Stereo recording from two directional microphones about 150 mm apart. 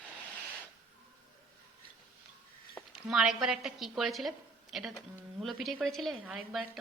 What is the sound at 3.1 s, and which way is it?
A woman's voice, centre (ahead or behind).